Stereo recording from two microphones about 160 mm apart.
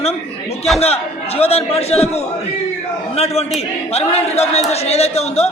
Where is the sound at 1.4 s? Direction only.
40° left (ahead or behind).